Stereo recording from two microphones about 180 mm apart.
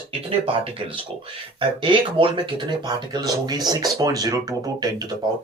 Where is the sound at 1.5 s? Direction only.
30° right (ahead or behind).